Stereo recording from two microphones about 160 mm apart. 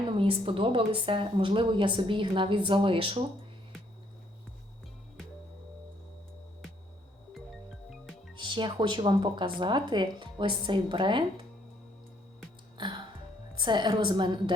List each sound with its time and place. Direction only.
0.2 s a woman's voice: 35° right (ahead or behind)
7.3 s music: centre (ahead or behind)
8.4 s a woman's voice: 30° right (ahead or behind)
13.6 s speech: 30° right (ahead or behind)